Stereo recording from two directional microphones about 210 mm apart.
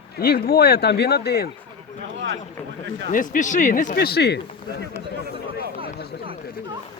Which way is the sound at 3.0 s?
40° left (ahead or behind).